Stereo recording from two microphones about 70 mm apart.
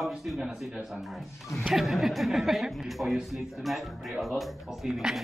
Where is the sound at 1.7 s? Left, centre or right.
Centre.